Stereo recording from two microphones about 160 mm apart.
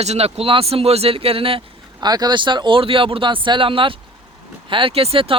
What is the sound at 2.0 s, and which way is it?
Speech, 25° right (ahead or behind).